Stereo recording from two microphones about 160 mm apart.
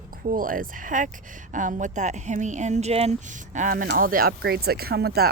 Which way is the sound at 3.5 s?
55° right (ahead or behind).